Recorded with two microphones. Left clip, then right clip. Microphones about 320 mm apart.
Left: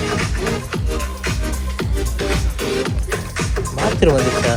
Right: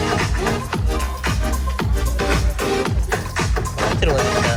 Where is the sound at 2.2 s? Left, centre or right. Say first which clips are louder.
Right 2 dB; right.